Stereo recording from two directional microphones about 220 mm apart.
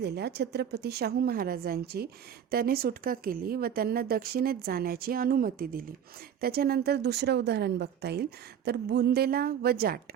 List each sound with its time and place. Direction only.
0.0 s speech: 50° right (ahead or behind)